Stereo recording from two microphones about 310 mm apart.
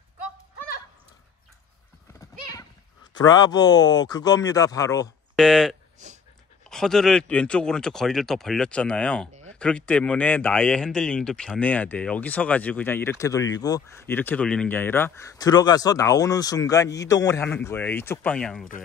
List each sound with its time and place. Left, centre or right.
3.2 s speech: centre
6.0 s dog: right
6.7 s speech: centre